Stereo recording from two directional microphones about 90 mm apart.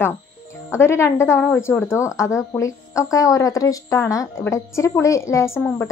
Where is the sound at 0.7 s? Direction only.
30° left (ahead or behind).